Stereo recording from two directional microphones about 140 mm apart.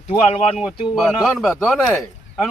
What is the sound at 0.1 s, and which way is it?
Speech, 45° left (ahead or behind).